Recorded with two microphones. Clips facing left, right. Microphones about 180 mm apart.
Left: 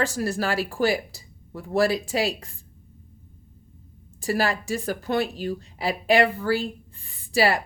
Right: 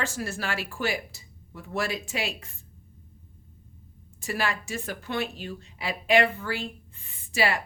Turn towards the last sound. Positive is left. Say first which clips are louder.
# left 5 dB
turn(degrees=35)  # may be behind; listen again after turning